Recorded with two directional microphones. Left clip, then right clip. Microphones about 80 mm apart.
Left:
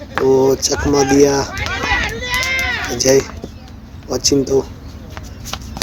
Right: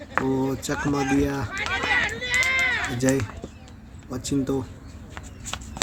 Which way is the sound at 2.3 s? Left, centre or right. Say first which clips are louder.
Left 4 dB; right.